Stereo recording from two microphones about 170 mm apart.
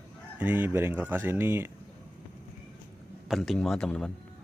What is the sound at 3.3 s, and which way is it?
Speech, centre (ahead or behind).